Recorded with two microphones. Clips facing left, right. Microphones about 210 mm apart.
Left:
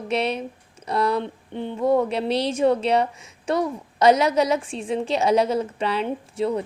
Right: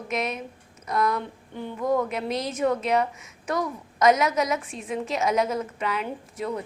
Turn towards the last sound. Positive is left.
turn(degrees=30)  # may be behind; listen again after turning